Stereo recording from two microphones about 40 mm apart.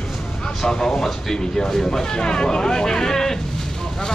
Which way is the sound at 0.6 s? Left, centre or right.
Centre.